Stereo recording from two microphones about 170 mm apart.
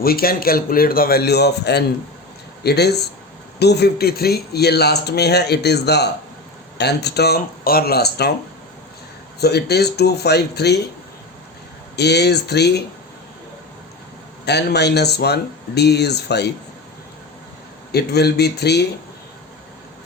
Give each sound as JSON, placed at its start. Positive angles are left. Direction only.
{"t": 0.0, "sound": "a man's voice", "side_deg": 60}
{"t": 9.4, "sound": "speech", "side_deg": 70}
{"t": 11.9, "sound": "speech", "side_deg": 75}
{"t": 14.4, "sound": "speech", "side_deg": 75}
{"t": 17.9, "sound": "speech", "side_deg": 70}